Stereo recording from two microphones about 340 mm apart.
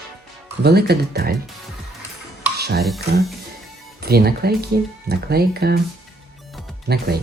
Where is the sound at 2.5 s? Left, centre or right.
Right.